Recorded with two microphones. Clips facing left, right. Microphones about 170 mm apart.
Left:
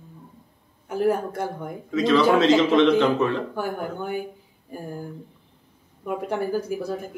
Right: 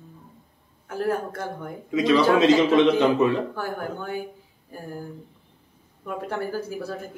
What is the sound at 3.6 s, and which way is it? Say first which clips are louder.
Speech: left 2 dB; 15° left (ahead or behind).